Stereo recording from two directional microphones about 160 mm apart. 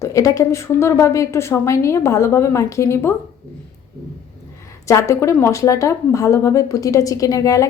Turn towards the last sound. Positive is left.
turn(degrees=20)  # may be behind; listen again after turning